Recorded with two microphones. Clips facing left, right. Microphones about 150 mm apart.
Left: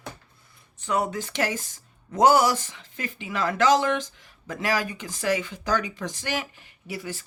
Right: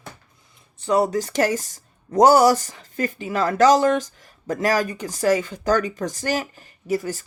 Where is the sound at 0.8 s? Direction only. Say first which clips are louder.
Right 7 dB; 35° right (ahead or behind).